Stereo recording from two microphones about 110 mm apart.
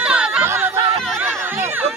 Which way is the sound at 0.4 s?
20° right (ahead or behind).